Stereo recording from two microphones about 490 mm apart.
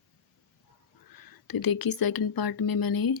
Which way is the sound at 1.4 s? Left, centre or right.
Left.